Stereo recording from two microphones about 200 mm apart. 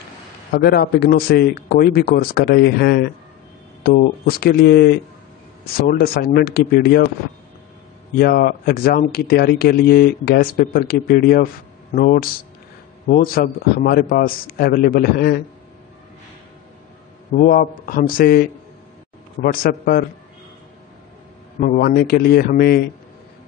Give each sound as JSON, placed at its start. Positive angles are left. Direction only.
{"t": 0.5, "sound": "speech", "side_deg": 55}
{"t": 8.2, "sound": "speech", "side_deg": 50}
{"t": 17.4, "sound": "speech", "side_deg": 45}
{"t": 21.5, "sound": "speech", "side_deg": 45}